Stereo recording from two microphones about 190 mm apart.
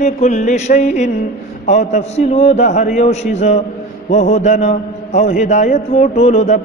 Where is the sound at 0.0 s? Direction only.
40° left (ahead or behind).